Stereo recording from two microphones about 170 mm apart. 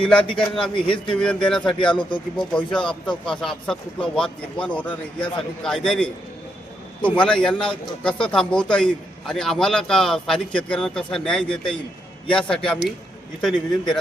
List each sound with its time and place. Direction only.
0.0 s a man's voice: 5° left (ahead or behind)
0.5 s a man's voice: 30° left (ahead or behind)
1.1 s a man's voice: 5° left (ahead or behind)
1.8 s speech: 30° left (ahead or behind)
3.4 s a man's voice: 5° left (ahead or behind)